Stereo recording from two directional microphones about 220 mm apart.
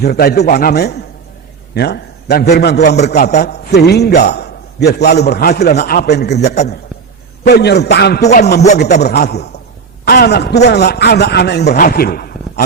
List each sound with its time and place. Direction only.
0.0 s a man's voice: 45° left (ahead or behind)
5.7 s a man's voice: 35° left (ahead or behind)